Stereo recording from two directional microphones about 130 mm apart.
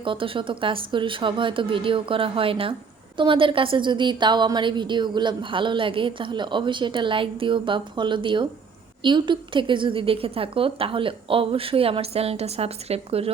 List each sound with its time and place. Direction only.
0.0 s a woman's voice: 40° right (ahead or behind)